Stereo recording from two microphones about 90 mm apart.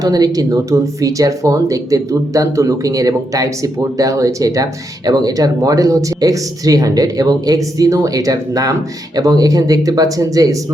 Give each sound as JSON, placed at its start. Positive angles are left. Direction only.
{"t": 0.0, "sound": "speech", "side_deg": -45}